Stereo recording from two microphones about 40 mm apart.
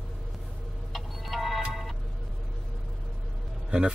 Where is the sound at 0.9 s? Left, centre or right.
Centre.